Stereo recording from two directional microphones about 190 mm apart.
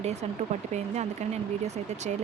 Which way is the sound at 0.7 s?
35° right (ahead or behind).